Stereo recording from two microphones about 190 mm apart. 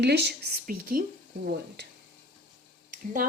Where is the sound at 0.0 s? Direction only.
60° right (ahead or behind).